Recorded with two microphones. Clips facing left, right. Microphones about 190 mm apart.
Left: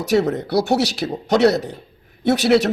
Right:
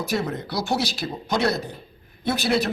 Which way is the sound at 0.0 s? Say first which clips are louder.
Left 8 dB; 70° left (ahead or behind).